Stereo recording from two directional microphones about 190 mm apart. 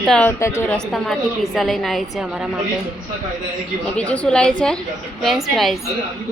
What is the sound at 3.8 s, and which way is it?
A woman's voice, 5° left (ahead or behind).